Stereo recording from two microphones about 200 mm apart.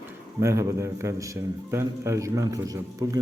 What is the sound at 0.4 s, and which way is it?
A man's voice, 15° right (ahead or behind).